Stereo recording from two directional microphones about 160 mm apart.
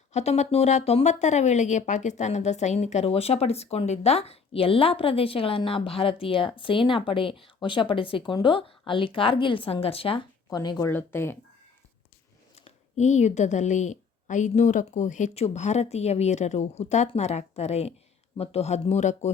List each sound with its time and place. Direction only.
0.1 s speech: 45° left (ahead or behind)
10.5 s speech: 25° left (ahead or behind)
12.6 s a woman's voice: 45° left (ahead or behind)